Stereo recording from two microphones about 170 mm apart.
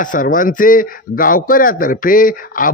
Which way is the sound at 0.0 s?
50° left (ahead or behind).